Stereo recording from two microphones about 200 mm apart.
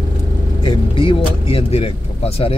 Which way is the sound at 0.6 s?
25° left (ahead or behind).